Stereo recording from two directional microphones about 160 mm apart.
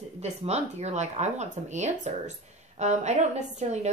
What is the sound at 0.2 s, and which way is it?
A woman's voice, 40° right (ahead or behind).